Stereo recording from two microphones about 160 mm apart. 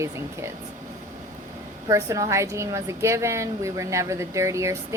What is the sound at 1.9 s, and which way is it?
A woman's voice, 20° right (ahead or behind).